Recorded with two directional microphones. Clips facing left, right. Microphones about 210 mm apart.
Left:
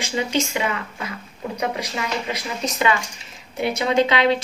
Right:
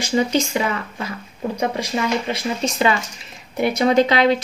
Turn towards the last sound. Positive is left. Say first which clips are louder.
# right 3 dB
turn(degrees=-40)  # may be behind; listen again after turning